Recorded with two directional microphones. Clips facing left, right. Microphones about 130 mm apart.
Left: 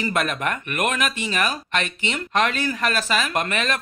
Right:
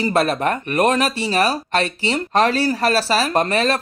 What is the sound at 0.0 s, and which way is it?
Speech, 35° right (ahead or behind).